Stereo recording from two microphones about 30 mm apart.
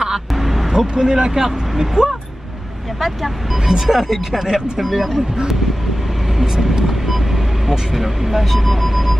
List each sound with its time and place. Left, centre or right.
0.3 s a sound: centre
0.7 s speech: right
3.6 s speech: centre
4.7 s speech: centre
7.7 s speech: centre